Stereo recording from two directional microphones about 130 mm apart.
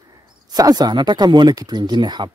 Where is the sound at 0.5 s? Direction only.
30° right (ahead or behind).